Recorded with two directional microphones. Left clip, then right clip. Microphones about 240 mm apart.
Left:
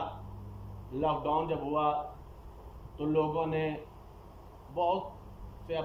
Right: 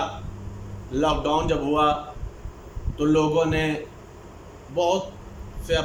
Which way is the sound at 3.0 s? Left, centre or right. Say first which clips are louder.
Right 9 dB; right.